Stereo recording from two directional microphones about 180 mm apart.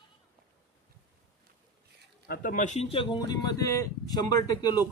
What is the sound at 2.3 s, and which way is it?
Speech, 50° left (ahead or behind).